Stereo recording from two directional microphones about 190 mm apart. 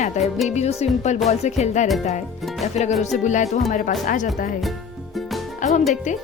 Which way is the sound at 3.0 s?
40° left (ahead or behind).